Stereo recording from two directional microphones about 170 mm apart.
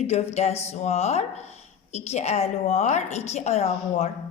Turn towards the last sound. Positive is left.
turn(degrees=40)  # may be behind; listen again after turning